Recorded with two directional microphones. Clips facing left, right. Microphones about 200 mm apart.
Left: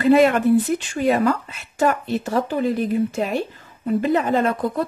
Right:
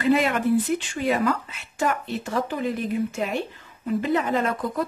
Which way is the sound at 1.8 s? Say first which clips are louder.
Left 5 dB; 40° left (ahead or behind).